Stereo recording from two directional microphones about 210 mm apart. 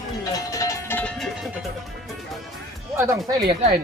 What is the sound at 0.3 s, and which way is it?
Music, 15° left (ahead or behind).